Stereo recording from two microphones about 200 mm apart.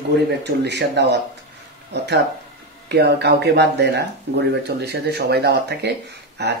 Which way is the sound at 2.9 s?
55° right (ahead or behind).